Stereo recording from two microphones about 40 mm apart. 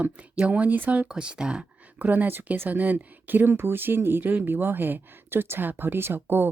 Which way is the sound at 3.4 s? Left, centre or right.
Right.